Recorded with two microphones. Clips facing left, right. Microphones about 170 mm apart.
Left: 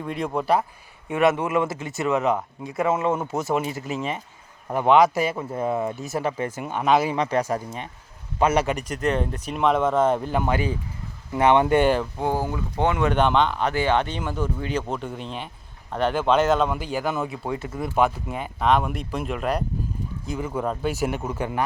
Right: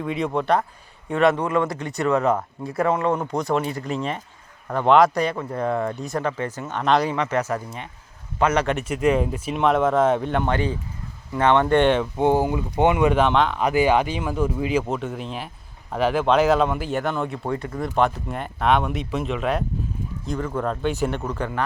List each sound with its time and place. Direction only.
0.0 s speech: centre (ahead or behind)
1.8 s speech: centre (ahead or behind)
2.0 s speech: 20° left (ahead or behind)
2.8 s speech: 5° left (ahead or behind)
8.4 s speech: 10° left (ahead or behind)
8.7 s speech: 5° right (ahead or behind)
12.1 s speech: 20° right (ahead or behind)
13.1 s speech: centre (ahead or behind); by 21.6 s 15° left (ahead or behind)